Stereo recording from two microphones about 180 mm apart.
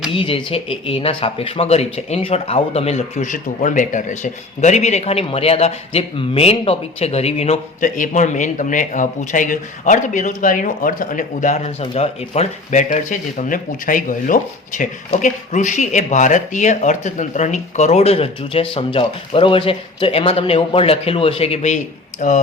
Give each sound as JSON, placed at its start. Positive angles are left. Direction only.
{"t": 0.1, "sound": "speech", "side_deg": 30}